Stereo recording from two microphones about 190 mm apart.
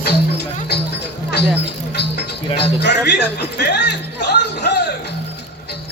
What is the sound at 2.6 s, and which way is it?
Speech, 60° left (ahead or behind).